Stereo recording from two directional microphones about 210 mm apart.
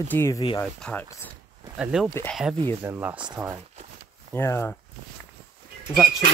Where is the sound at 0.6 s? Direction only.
5° left (ahead or behind).